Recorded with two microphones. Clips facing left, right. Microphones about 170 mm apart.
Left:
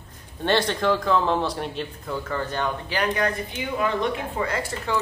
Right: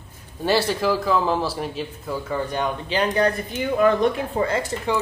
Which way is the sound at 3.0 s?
35° right (ahead or behind).